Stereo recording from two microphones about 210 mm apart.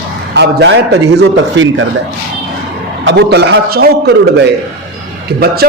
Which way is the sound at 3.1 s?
55° right (ahead or behind).